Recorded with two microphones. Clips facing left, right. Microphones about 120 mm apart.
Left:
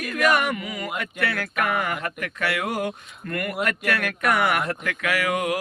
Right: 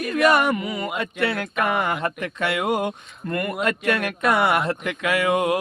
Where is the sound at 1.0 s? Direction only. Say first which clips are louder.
Right 3 dB; 25° right (ahead or behind).